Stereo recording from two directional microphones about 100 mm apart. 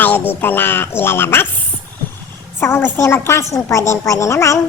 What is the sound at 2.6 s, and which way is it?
A woman's voice, 25° left (ahead or behind).